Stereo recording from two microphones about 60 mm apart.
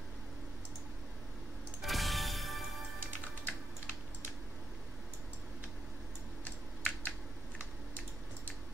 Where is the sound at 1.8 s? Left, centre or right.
Centre.